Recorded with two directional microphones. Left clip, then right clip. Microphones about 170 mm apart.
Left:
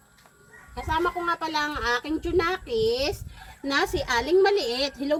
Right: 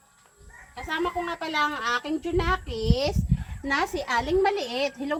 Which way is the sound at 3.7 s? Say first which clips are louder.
Left 1 dB; centre (ahead or behind).